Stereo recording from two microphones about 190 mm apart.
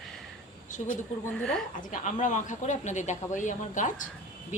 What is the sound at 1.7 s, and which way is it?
Speech, 40° left (ahead or behind).